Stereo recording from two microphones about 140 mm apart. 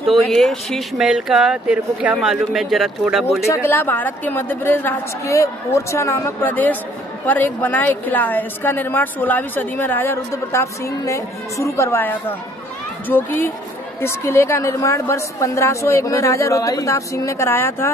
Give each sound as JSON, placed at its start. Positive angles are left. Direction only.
{"t": 0.1, "sound": "speech", "side_deg": 0}
{"t": 3.4, "sound": "a woman's voice", "side_deg": 15}